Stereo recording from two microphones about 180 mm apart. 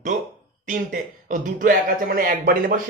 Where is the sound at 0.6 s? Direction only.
45° right (ahead or behind).